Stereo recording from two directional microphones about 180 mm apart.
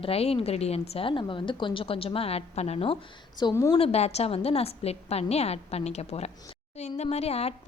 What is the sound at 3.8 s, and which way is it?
A woman's voice, 35° left (ahead or behind).